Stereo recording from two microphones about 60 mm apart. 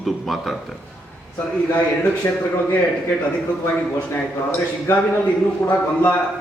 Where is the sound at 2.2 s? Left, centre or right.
Left.